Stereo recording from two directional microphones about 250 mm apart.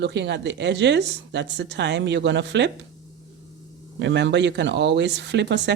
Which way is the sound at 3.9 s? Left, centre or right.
Right.